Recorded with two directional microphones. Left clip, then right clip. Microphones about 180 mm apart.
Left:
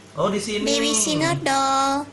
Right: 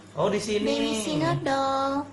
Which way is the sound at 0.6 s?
15° left (ahead or behind).